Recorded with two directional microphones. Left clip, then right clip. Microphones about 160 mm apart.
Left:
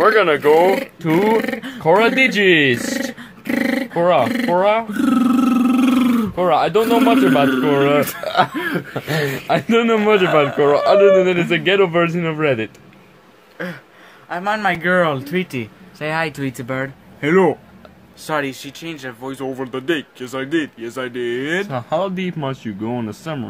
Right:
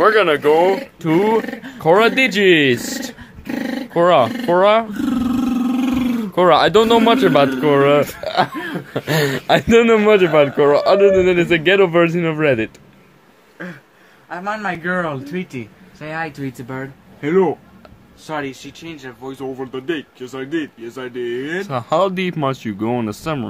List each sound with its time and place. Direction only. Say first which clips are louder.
0.0 s speech: even; 15° right (ahead or behind)
1.4 s speech: left 4 dB; 50° left (ahead or behind)
1.8 s a man's voice: right 1 dB; 25° right (ahead or behind)
3.2 s dog: left 5 dB; 50° left (ahead or behind)
3.9 s speech: right 3 dB; 35° right (ahead or behind)
4.9 s roar: left 4 dB; 40° left (ahead or behind)
6.3 s speech: right 5 dB; 50° right (ahead or behind)
7.6 s a man's voice: right 2 dB; 30° right (ahead or behind)
8.2 s a sound: left 1 dB; 20° right (ahead or behind)
8.5 s speech: left 4 dB; 45° left (ahead or behind)
8.9 s a man's voice: right 3 dB; 40° right (ahead or behind)
14.3 s speech: left 4 dB; 65° left (ahead or behind); by 21.6 s 50° left (ahead or behind)
21.6 s speech: right 4 dB; 30° right (ahead or behind)